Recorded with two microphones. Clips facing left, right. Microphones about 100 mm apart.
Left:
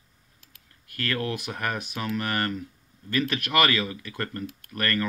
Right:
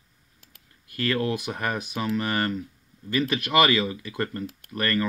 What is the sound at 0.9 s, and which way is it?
Speech, 15° right (ahead or behind).